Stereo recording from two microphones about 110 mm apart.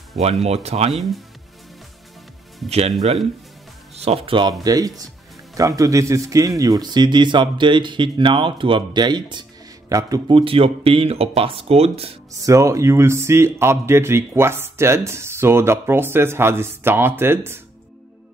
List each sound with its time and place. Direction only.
0.2 s speech: 70° right (ahead or behind)
0.9 s speech: centre (ahead or behind)
3.9 s speech: 70° right (ahead or behind)
4.6 s speech: 35° right (ahead or behind)
10.3 s speech: 55° right (ahead or behind)
12.4 s speech: 30° right (ahead or behind)